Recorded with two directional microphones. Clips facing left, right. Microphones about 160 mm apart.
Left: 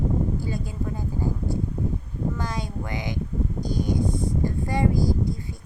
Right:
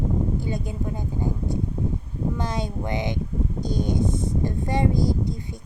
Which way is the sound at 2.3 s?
25° right (ahead or behind).